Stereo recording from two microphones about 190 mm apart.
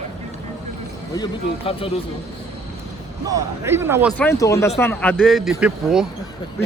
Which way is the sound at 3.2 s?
15° right (ahead or behind).